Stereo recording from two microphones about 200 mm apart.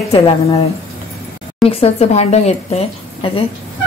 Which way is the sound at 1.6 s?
30° left (ahead or behind).